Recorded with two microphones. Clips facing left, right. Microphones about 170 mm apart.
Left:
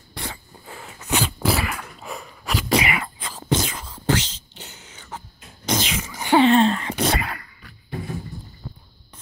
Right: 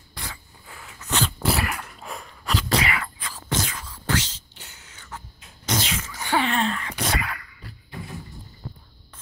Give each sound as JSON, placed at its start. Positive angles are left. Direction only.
{"t": 0.1, "sound": "a sound", "side_deg": 25}
{"t": 1.0, "sound": "dog", "side_deg": 10}
{"t": 1.4, "sound": "sneeze", "side_deg": 0}